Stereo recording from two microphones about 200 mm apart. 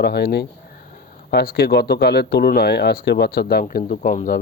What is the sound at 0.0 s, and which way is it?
Speech, 55° left (ahead or behind).